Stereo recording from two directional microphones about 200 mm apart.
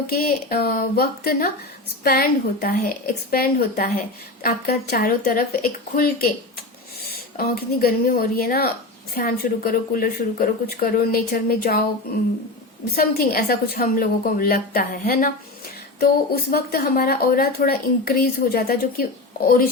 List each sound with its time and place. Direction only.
0.1 s a woman's voice: 50° left (ahead or behind)
7.3 s a woman's voice: 45° left (ahead or behind)
13.0 s a woman's voice: 50° left (ahead or behind)